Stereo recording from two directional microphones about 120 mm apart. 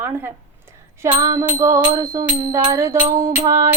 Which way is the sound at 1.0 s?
25° right (ahead or behind).